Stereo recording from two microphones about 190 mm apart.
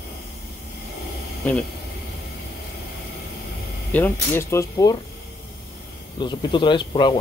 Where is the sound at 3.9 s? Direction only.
10° left (ahead or behind).